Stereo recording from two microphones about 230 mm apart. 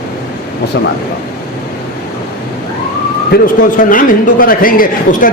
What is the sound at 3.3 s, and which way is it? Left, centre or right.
A man's voice, left.